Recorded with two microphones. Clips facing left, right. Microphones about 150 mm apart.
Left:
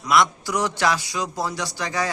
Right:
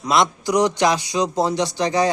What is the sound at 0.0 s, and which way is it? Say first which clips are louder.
Speech: right 1 dB; 25° right (ahead or behind).